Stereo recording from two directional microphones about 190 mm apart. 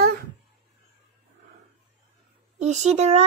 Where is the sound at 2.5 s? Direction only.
40° right (ahead or behind).